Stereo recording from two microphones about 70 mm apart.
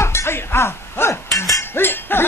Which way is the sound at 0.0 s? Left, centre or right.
Left.